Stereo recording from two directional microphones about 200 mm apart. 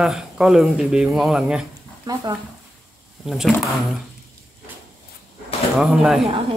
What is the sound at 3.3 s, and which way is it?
Speech, centre (ahead or behind).